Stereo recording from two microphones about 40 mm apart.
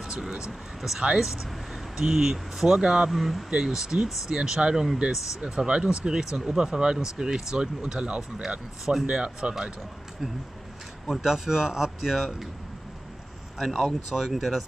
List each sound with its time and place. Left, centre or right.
0.3 s a man's voice: centre
3.1 s speech: centre
3.4 s a man's voice: centre
11.1 s a man's voice: centre
13.6 s speech: centre